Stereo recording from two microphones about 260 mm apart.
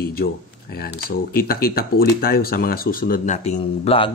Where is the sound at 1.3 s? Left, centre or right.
Left.